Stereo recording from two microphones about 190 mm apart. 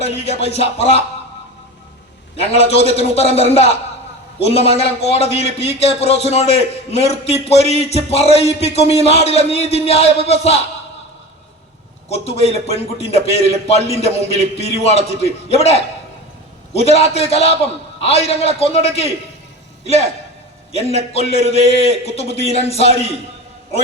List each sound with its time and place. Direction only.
0.0 s a man's voice: 35° left (ahead or behind)
2.3 s a man's voice: 30° left (ahead or behind)
12.0 s a man's voice: 35° left (ahead or behind)